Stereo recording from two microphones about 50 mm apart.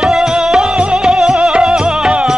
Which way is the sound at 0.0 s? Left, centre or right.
Centre.